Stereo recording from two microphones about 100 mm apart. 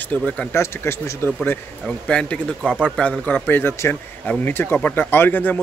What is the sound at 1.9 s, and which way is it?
A man's voice, 10° left (ahead or behind).